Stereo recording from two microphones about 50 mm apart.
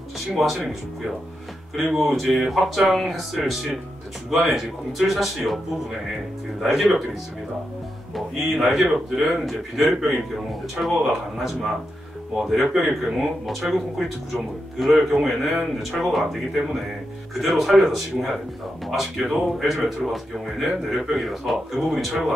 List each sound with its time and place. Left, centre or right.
0.3 s speech: centre
1.9 s speech: centre
6.6 s speech: centre
8.4 s speech: centre